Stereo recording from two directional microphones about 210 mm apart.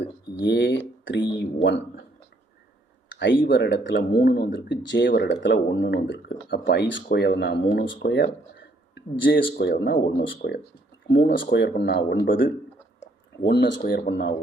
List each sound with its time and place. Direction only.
0.4 s speech: 55° left (ahead or behind)
3.1 s speech: 55° left (ahead or behind)
13.5 s speech: 55° left (ahead or behind)